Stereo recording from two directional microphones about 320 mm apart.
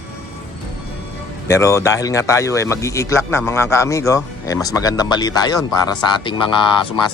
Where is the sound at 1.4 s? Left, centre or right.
Centre.